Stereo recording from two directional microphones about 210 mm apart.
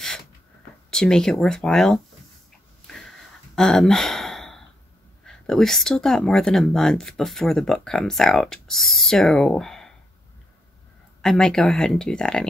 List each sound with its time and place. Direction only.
0.8 s speech: 5° left (ahead or behind)
3.5 s gasp: 5° left (ahead or behind)
5.2 s speech: 5° left (ahead or behind)
11.1 s speech: 5° left (ahead or behind)